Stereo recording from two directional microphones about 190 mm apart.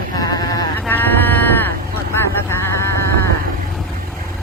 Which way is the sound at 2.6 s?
15° left (ahead or behind).